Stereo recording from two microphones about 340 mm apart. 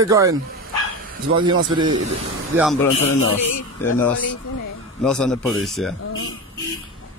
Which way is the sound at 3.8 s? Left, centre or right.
Centre.